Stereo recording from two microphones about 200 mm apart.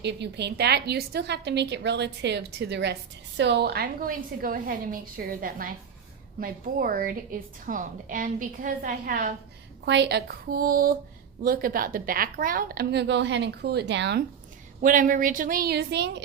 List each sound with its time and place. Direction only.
0.0 s a woman's voice: 60° right (ahead or behind); by 9.3 s 40° right (ahead or behind)
9.8 s a woman's voice: 60° right (ahead or behind)
14.8 s a woman's voice: 40° right (ahead or behind); by 16.2 s 60° right (ahead or behind)